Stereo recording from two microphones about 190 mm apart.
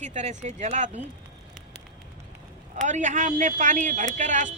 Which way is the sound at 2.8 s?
40° right (ahead or behind).